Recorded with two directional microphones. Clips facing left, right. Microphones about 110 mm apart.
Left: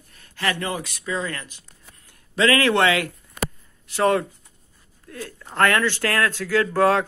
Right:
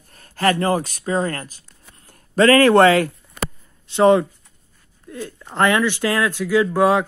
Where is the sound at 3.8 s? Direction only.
20° right (ahead or behind).